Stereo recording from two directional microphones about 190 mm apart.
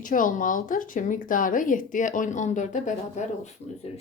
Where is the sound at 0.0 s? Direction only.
45° left (ahead or behind).